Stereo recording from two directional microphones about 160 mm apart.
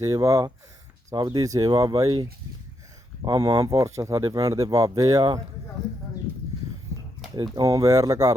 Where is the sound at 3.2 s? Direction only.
25° right (ahead or behind).